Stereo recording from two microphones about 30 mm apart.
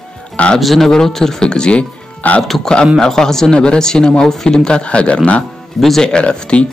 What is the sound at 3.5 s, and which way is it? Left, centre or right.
Speech, left.